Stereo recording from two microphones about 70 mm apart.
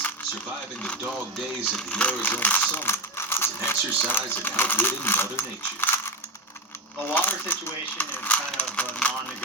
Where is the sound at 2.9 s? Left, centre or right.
Left.